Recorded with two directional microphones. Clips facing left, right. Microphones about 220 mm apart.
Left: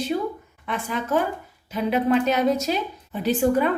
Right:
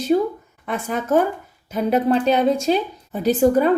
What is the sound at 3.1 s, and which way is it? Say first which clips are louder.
Speech: right 4 dB; 40° right (ahead or behind).